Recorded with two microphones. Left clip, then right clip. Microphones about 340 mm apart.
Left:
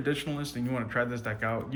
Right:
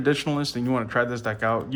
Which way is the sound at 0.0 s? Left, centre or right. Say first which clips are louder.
Right 8 dB; centre.